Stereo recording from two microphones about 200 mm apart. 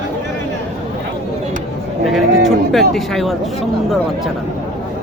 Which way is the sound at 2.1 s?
Centre (ahead or behind).